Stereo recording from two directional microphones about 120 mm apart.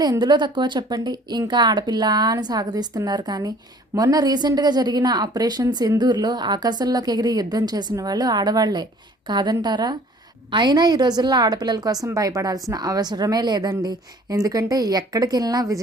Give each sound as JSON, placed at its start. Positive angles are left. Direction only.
{"t": 0.0, "sound": "a woman's voice", "side_deg": -35}